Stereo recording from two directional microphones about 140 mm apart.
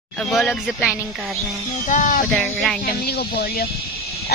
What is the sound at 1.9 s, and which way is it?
Speech, 65° left (ahead or behind).